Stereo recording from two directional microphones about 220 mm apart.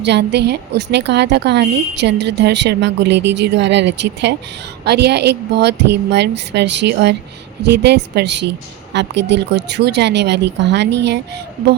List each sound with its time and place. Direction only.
0.0 s a woman's voice: 50° right (ahead or behind)